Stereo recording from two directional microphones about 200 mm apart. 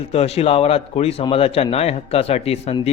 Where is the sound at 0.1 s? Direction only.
30° left (ahead or behind).